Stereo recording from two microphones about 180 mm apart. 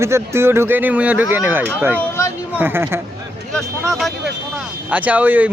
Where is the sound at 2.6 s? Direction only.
10° right (ahead or behind).